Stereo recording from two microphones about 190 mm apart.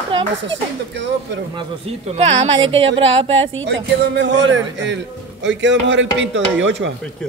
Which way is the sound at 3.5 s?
65° right (ahead or behind).